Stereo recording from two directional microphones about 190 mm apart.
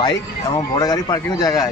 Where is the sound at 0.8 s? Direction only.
20° left (ahead or behind).